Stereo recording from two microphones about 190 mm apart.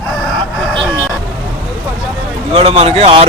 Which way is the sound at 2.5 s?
30° right (ahead or behind).